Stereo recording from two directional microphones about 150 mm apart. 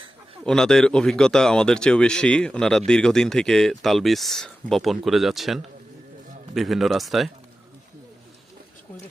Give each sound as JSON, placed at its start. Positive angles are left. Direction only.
{"t": 0.4, "sound": "speech", "side_deg": 5}